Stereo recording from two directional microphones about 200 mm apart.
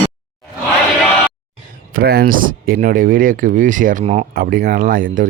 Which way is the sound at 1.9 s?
50° right (ahead or behind).